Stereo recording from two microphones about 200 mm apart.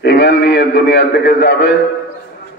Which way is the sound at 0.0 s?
55° left (ahead or behind).